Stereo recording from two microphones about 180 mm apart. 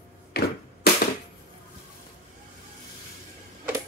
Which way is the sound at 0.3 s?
60° left (ahead or behind).